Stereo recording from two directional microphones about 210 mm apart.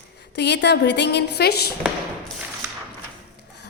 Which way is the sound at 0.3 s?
55° left (ahead or behind).